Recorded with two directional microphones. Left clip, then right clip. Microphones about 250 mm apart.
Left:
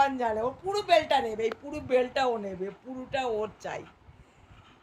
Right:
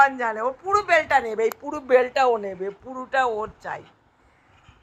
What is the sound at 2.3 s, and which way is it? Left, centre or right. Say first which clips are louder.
Speech: right 8 dB; right.